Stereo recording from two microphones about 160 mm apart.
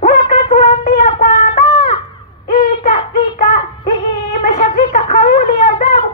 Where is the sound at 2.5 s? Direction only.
25° left (ahead or behind).